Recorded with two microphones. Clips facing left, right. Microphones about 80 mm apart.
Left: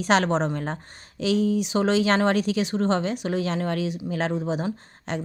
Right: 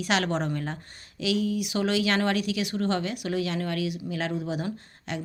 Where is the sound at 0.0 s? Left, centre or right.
Left.